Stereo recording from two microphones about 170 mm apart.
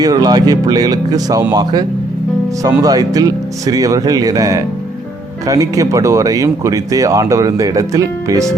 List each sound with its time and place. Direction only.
0.0 s speech: 20° right (ahead or behind)